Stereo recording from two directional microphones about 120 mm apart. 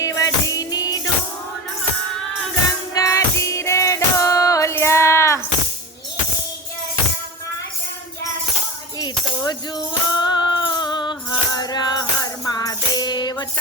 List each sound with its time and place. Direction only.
0.0 s music: 30° left (ahead or behind)
2.9 s music: 25° left (ahead or behind)
9.0 s music: 35° left (ahead or behind)